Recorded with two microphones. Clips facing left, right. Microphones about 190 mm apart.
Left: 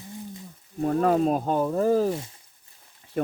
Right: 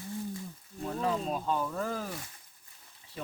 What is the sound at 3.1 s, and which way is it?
Speech, 60° left (ahead or behind).